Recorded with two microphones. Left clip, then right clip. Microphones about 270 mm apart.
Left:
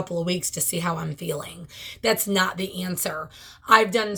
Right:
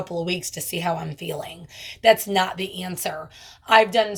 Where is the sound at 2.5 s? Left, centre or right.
Centre.